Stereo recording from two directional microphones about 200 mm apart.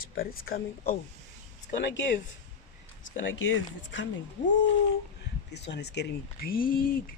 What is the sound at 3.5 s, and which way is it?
Speech, 70° left (ahead or behind).